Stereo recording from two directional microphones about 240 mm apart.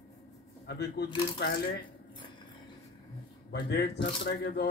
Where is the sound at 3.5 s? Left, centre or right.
Left.